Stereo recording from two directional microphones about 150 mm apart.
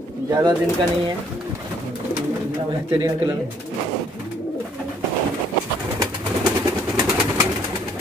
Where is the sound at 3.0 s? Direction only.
25° right (ahead or behind).